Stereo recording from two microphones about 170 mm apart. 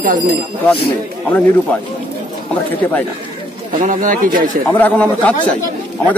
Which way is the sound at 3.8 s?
50° right (ahead or behind).